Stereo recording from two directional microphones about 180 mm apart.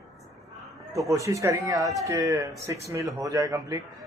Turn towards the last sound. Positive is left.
turn(degrees=-20)  # may be behind; listen again after turning